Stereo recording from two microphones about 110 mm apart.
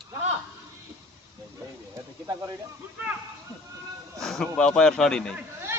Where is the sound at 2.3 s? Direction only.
30° right (ahead or behind).